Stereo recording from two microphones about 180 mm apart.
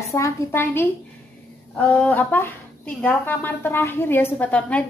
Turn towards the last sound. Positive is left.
turn(degrees=10)  # may be behind; listen again after turning